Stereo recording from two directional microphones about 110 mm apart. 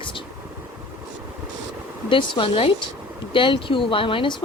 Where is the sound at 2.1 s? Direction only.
50° left (ahead or behind).